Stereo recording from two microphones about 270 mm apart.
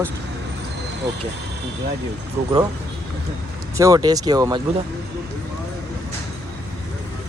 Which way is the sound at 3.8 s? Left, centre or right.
Centre.